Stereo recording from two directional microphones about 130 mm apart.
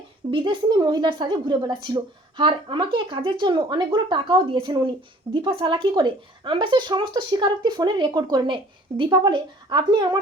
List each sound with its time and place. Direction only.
0.3 s a woman's voice: 40° right (ahead or behind)